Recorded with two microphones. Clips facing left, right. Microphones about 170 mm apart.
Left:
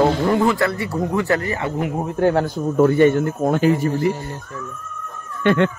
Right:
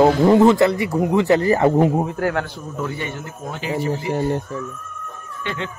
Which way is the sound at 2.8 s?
50° left (ahead or behind).